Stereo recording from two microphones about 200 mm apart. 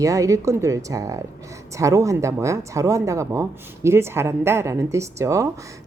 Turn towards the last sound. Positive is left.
turn(degrees=-15)  # may be behind; listen again after turning